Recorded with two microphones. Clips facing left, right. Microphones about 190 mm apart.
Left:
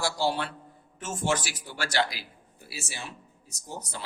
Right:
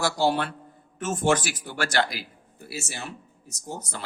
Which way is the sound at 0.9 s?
65° right (ahead or behind).